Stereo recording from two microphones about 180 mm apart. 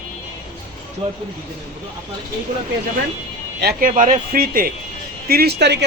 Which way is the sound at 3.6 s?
55° right (ahead or behind).